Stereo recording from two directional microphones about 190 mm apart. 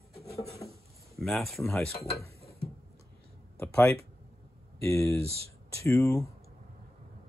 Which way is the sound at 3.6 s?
15° left (ahead or behind).